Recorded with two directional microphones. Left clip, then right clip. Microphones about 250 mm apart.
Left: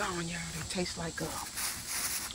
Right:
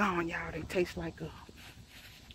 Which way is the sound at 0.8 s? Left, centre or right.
Right.